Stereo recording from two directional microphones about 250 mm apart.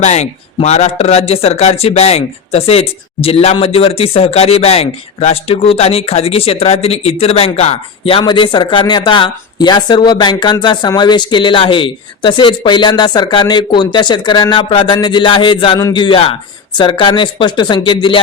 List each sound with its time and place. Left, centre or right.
0.0 s speech: left